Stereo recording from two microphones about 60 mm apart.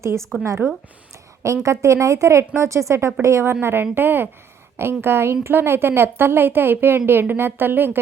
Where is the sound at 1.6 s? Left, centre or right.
Right.